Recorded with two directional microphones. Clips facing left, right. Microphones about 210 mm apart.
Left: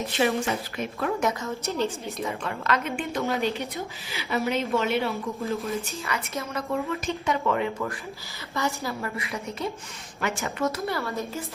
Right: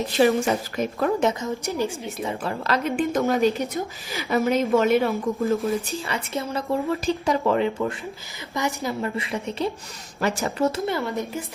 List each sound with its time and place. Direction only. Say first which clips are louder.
0.2 s speech: right 6 dB; 35° right (ahead or behind)
1.2 s a woman's voice: right 4 dB; 20° right (ahead or behind)
2.2 s speech: right 2 dB; 35° right (ahead or behind)
5.6 s speech: right 5 dB; 30° right (ahead or behind)
8.5 s a woman's voice: right 3 dB; 15° right (ahead or behind)